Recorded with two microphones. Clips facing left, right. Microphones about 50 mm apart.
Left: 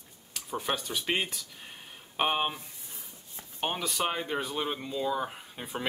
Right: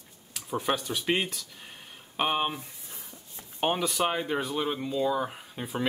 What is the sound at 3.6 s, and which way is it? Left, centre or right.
Speech, centre.